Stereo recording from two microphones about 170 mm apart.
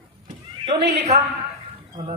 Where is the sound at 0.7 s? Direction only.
80° right.